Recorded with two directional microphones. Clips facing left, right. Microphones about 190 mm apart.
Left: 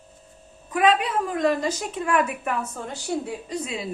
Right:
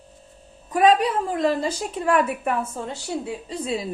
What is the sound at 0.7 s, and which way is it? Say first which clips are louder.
A woman's voice: right 3 dB; 40° right (ahead or behind).